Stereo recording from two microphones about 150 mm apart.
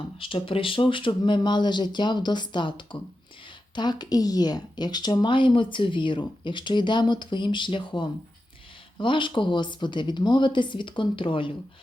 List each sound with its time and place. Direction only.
0.2 s speech: 35° left (ahead or behind)